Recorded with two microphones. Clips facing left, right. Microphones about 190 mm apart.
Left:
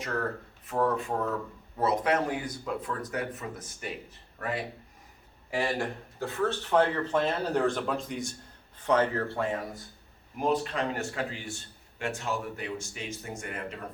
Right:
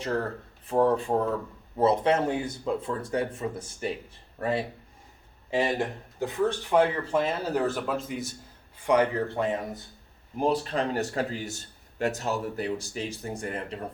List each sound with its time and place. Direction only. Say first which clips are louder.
0.0 s a man's voice: right 3 dB; 30° right (ahead or behind); by 8.4 s 5° right (ahead or behind)
8.8 s speech: right 2 dB; 15° right (ahead or behind)
10.3 s a man's voice: right 2 dB; 35° right (ahead or behind)